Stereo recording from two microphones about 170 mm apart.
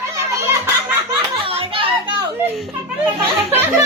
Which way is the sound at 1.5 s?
35° right (ahead or behind).